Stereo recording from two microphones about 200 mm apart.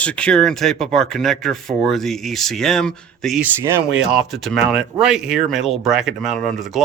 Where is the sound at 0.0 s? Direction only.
5° left (ahead or behind).